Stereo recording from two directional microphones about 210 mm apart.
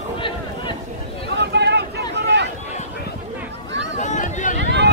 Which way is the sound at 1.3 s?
55° right (ahead or behind).